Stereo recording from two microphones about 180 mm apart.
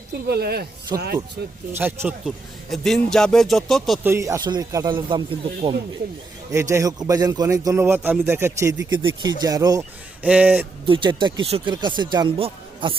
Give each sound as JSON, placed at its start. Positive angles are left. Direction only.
{"t": 0.3, "sound": "speech", "side_deg": -60}
{"t": 1.8, "sound": "speech", "side_deg": -10}
{"t": 2.6, "sound": "speech", "side_deg": 0}
{"t": 4.0, "sound": "a man's voice", "side_deg": -15}
{"t": 10.2, "sound": "speech", "side_deg": -5}
{"t": 10.8, "sound": "a man's voice", "side_deg": -30}